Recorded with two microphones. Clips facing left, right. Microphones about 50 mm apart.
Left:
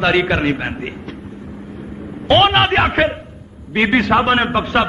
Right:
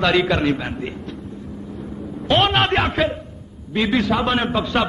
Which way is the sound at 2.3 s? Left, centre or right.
Left.